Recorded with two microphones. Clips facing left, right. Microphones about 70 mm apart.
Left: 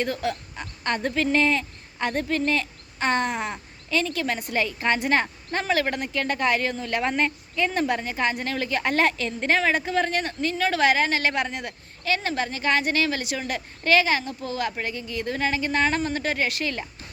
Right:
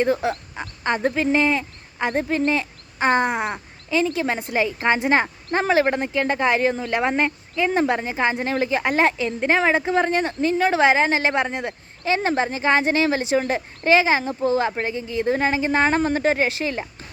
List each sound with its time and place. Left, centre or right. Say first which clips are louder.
0.0 s speech: right 6 dB; right